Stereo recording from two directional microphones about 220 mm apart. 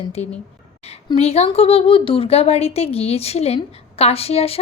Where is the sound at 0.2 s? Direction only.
30° left (ahead or behind).